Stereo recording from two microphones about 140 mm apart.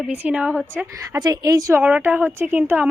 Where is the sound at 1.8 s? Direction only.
10° right (ahead or behind).